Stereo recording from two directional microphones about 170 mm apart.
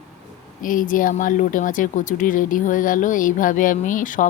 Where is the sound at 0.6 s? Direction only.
50° left (ahead or behind).